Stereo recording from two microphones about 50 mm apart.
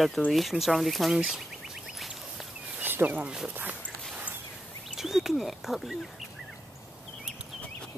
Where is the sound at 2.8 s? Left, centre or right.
Right.